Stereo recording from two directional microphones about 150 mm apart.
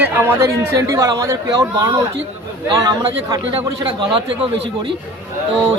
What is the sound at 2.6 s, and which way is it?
Speech, 25° right (ahead or behind).